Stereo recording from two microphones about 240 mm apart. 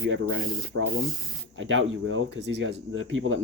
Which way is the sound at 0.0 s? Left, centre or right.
Right.